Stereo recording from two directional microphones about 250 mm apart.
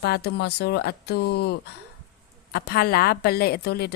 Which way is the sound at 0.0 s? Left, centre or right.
Left.